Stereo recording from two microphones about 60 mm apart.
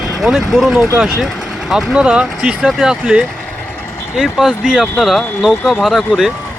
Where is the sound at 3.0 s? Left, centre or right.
Centre.